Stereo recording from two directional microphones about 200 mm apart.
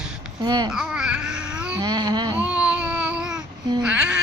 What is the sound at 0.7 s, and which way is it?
Babbling, 5° right (ahead or behind).